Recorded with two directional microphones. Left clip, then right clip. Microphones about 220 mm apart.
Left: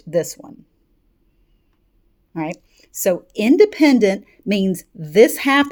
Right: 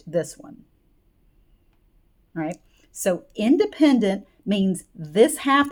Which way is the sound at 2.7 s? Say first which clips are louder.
Left 6 dB; 30° left (ahead or behind).